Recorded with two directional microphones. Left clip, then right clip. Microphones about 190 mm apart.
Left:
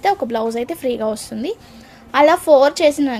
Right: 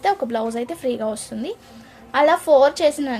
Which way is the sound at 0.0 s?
25° left (ahead or behind).